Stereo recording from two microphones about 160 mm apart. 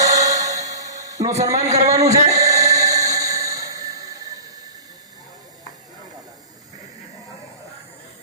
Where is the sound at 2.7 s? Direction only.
20° right (ahead or behind).